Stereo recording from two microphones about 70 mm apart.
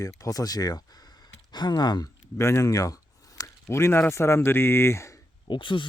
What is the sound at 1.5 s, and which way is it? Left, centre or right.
Speech, left.